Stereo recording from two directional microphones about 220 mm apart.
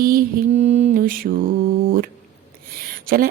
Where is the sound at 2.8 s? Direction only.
45° right (ahead or behind).